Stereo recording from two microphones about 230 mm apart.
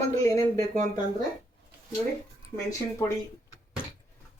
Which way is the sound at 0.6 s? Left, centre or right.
Right.